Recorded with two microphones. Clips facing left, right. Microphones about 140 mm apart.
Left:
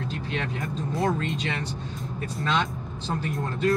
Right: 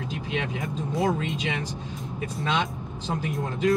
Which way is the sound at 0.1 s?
5° right (ahead or behind).